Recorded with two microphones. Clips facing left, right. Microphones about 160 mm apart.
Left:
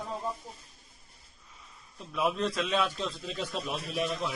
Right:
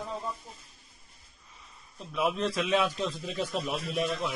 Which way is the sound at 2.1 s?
Centre (ahead or behind).